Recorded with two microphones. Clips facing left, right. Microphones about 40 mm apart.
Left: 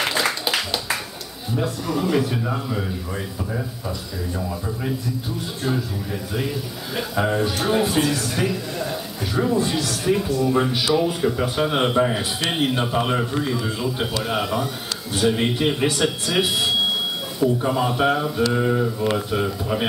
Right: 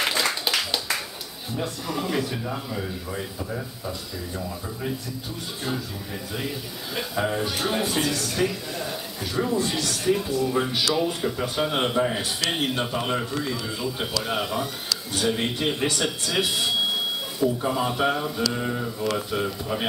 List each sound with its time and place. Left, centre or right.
0.0 s a sound: centre
1.6 s speech: centre
2.2 s speech: centre
7.0 s speech: centre
13.0 s mantra: centre
13.7 s speech: centre
17.6 s speech: centre
18.5 s mantra: centre
19.1 s speech: centre